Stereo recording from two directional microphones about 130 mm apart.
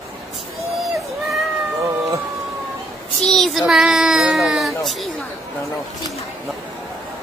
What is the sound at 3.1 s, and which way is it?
A child's voice, centre (ahead or behind).